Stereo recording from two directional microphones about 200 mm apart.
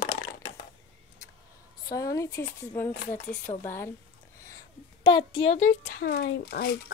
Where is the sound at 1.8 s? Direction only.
15° left (ahead or behind).